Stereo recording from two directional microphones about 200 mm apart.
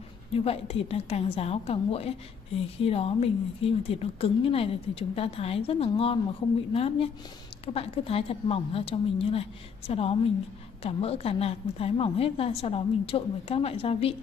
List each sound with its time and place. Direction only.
0.3 s a woman's voice: 30° left (ahead or behind)